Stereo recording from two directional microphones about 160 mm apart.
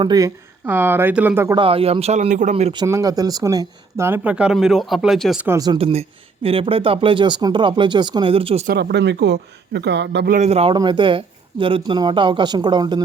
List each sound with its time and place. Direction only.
0.0 s speech: 25° right (ahead or behind)
1.5 s speech: 35° right (ahead or behind)
2.7 s speech: 20° right (ahead or behind); by 5.5 s centre (ahead or behind)
5.5 s speech: 20° right (ahead or behind)
5.7 s speech: 40° right (ahead or behind)
8.6 s a man's voice: 85° right
10.3 s speech: 45° right (ahead or behind)
10.8 s speech: 30° right (ahead or behind)